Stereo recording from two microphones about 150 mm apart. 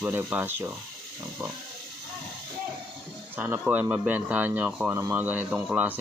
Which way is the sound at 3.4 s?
15° right (ahead or behind).